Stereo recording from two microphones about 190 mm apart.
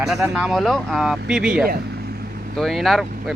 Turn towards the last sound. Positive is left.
turn(degrees=0)  # may be behind; listen again after turning